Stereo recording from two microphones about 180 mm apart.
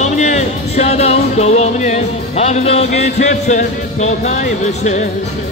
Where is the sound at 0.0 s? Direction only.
40° left (ahead or behind).